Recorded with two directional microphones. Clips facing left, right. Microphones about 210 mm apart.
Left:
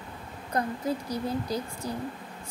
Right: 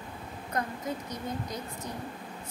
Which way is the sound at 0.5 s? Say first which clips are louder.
Left 5 dB; 35° left (ahead or behind).